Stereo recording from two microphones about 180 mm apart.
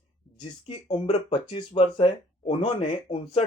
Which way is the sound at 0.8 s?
30° left (ahead or behind).